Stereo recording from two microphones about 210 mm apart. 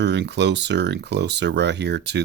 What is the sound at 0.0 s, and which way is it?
Speech, 55° right (ahead or behind).